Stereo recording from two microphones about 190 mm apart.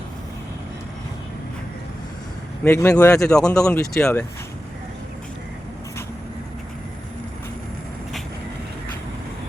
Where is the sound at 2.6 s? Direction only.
10° left (ahead or behind).